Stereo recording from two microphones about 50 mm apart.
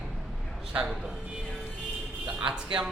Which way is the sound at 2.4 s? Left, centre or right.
Centre.